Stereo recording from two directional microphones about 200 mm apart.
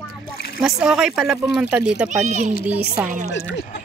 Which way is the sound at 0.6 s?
5° right (ahead or behind).